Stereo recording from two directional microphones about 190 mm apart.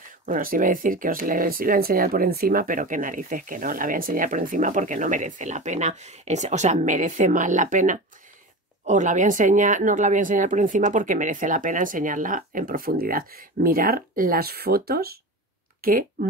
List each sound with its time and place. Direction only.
0.3 s speech: 45° right (ahead or behind)